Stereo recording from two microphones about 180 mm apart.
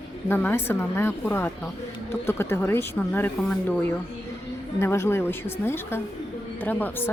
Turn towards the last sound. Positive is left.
turn(degrees=10)  # may be behind; listen again after turning